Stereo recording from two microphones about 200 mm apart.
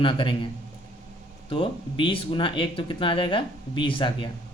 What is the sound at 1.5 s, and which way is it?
Speech, 25° left (ahead or behind).